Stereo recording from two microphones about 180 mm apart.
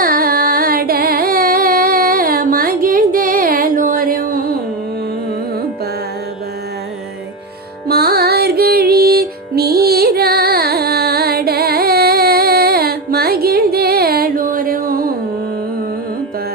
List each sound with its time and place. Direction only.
0.0 s carnatic music: 55° right (ahead or behind)
7.9 s music: 60° right (ahead or behind)